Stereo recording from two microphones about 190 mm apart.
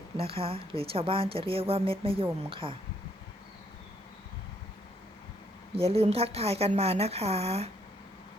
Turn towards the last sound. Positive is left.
turn(degrees=-35)  # may be behind; listen again after turning